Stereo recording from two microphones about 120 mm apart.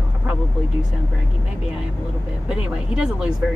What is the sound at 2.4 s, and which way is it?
Speech, 10° right (ahead or behind).